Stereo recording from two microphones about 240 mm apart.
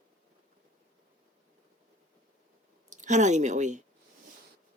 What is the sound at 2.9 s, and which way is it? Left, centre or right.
Speech, right.